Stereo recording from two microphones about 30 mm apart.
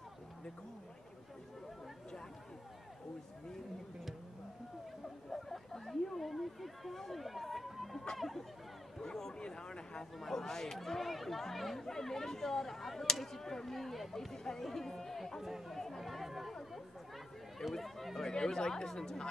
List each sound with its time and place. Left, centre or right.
5.3 s a sound: centre
8.9 s a man's voice: centre
10.3 s speech: centre
11.0 s speech: centre
13.7 s speech: centre
14.3 s speech: centre
14.6 s chatter: centre
17.6 s run: centre
18.2 s chatter: left